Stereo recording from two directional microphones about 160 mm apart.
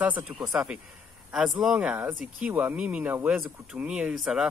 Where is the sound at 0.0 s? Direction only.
10° right (ahead or behind).